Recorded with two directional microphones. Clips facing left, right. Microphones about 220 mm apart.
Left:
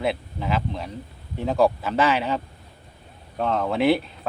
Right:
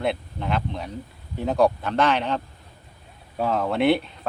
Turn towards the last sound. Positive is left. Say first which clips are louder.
# even
turn(degrees=0)  # may be behind; listen again after turning